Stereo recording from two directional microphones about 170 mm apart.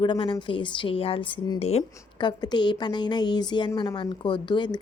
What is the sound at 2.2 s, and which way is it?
Speech, 25° left (ahead or behind).